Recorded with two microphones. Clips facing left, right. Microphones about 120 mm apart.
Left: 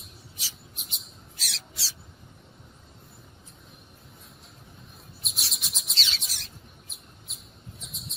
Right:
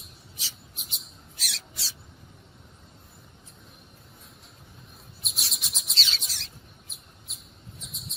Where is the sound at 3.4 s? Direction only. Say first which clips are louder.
Even; centre (ahead or behind).